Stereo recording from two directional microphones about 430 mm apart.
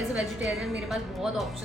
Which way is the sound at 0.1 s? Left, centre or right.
Centre.